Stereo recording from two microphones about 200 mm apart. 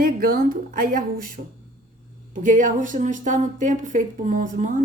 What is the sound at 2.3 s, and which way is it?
Speech, 40° right (ahead or behind).